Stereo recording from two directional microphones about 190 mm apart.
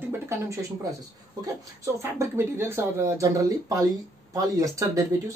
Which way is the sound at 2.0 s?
15° right (ahead or behind).